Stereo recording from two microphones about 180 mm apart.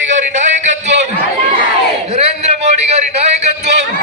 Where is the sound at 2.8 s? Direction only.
35° right (ahead or behind).